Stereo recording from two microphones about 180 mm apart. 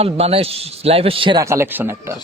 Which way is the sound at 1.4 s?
15° right (ahead or behind).